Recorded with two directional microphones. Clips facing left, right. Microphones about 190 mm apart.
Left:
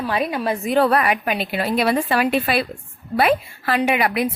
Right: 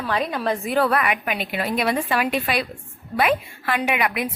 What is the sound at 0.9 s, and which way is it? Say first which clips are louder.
A woman's voice: left 3 dB; 30° left (ahead or behind).